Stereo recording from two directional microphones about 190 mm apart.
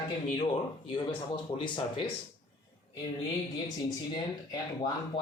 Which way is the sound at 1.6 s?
25° left (ahead or behind).